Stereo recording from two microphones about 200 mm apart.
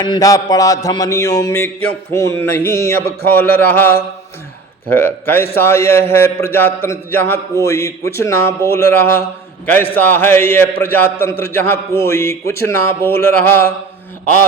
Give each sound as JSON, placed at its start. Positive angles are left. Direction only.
{"t": 0.0, "sound": "a man's voice", "side_deg": 20}